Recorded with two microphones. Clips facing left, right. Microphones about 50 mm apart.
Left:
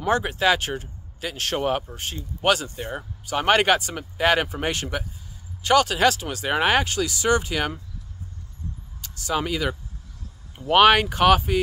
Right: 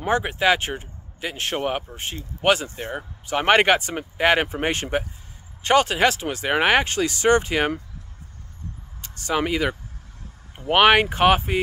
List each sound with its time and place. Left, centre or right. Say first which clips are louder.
0.0 s speech: right 1 dB; right
9.0 s speech: right 2 dB; right